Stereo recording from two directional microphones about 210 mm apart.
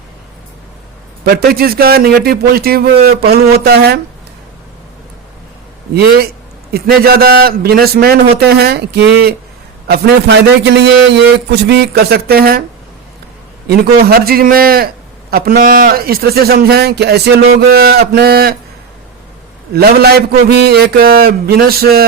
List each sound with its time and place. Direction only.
1.2 s a man's voice: 50° right (ahead or behind)
6.7 s a man's voice: 45° right (ahead or behind)
13.7 s a man's voice: 45° right (ahead or behind)
19.7 s a man's voice: 50° right (ahead or behind)